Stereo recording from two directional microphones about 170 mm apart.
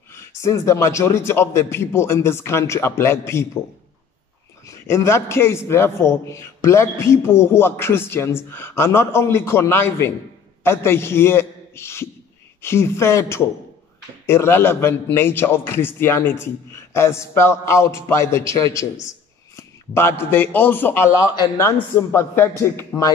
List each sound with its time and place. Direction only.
0.1 s a man's voice: 15° left (ahead or behind)
4.6 s a man's voice: 15° left (ahead or behind)